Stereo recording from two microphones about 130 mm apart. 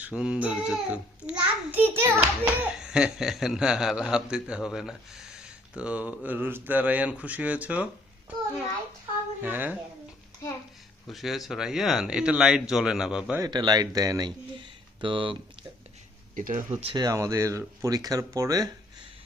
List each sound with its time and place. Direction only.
0.0 s a child's voice: 5° right (ahead or behind)
9.4 s speech: 15° right (ahead or behind)
11.0 s a child's voice: centre (ahead or behind)
13.4 s speech: 35° right (ahead or behind)
16.3 s speech: 90° right
16.8 s speech: 35° right (ahead or behind)